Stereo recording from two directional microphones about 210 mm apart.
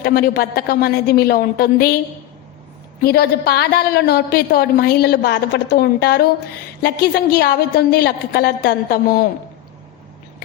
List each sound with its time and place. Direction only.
0.0 s a woman's voice: 50° left (ahead or behind)
3.0 s a woman's voice: 50° left (ahead or behind)